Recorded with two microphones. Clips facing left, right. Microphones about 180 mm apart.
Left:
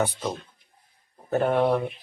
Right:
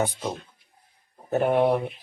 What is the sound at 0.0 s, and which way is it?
Speech, 15° right (ahead or behind).